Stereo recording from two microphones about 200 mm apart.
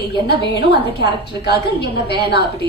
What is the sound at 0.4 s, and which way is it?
A woman's voice, 55° left (ahead or behind).